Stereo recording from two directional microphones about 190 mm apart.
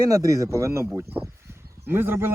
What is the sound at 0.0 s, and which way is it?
A man's voice, 15° right (ahead or behind).